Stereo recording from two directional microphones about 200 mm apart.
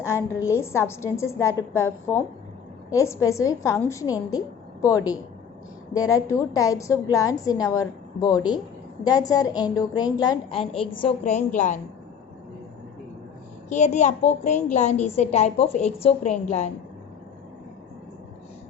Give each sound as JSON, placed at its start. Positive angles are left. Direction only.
{"t": 0.0, "sound": "a woman's voice", "side_deg": 15}
{"t": 5.9, "sound": "a woman's voice", "side_deg": 15}
{"t": 11.2, "sound": "a woman's voice", "side_deg": 35}
{"t": 13.7, "sound": "a woman's voice", "side_deg": 35}